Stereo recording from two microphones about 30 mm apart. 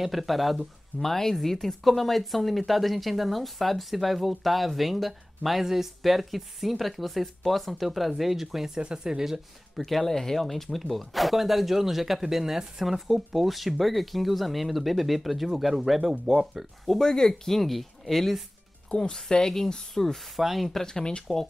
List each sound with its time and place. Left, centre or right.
0.0 s speech: centre
0.9 s speech: centre
8.8 s speech: right
9.8 s speech: centre
17.0 s speech: centre
18.9 s speech: left; by 20.2 s centre
20.3 s speech: centre
20.8 s speech: left